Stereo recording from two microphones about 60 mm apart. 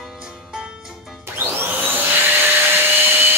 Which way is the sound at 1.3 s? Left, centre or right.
Right.